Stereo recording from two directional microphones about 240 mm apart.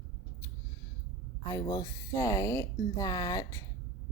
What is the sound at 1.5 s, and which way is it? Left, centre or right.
Speech, centre.